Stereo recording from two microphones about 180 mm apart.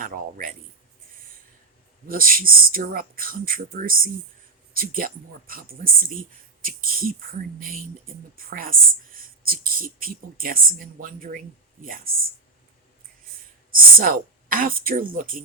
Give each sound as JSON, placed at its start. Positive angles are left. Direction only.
{"t": 0.0, "sound": "speech", "side_deg": -50}
{"t": 2.0, "sound": "speech", "side_deg": -50}
{"t": 13.7, "sound": "speech", "side_deg": -50}